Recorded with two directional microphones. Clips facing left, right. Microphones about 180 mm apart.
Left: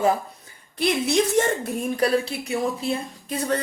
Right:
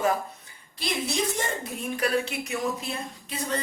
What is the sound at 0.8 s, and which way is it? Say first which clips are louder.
Speech: left 8 dB; 70° left (ahead or behind).